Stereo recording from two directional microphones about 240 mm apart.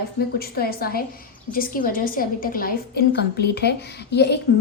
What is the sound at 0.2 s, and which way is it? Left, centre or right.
A woman's voice, left.